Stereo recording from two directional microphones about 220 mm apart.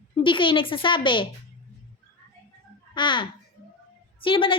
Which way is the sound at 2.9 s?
20° left (ahead or behind).